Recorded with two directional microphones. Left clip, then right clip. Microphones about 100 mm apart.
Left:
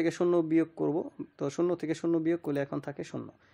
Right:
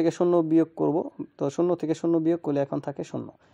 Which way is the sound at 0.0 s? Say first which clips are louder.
Right 5 dB; 35° right (ahead or behind).